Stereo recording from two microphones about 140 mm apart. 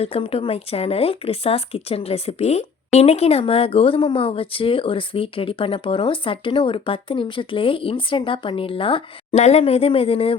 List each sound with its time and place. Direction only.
0.0 s speech: 45° left (ahead or behind)